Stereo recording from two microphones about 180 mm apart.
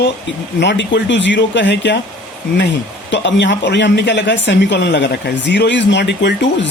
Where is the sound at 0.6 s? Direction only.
75° left (ahead or behind).